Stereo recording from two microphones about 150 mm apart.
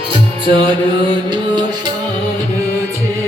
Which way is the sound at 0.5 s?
30° right (ahead or behind).